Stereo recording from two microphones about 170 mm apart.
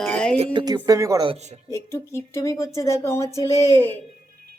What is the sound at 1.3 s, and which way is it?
Speech, 40° right (ahead or behind).